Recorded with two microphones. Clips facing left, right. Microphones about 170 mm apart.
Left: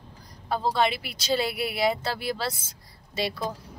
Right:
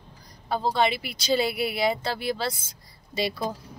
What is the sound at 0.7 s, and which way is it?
Speech, centre (ahead or behind).